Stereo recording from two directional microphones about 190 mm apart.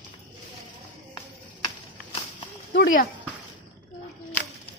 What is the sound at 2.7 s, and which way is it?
Speech, 50° left (ahead or behind).